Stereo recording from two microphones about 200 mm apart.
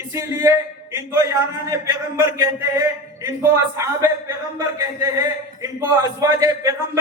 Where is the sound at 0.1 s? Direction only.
15° right (ahead or behind).